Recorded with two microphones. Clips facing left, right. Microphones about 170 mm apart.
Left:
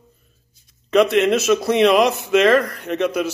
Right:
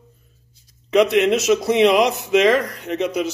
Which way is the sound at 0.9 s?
15° right (ahead or behind).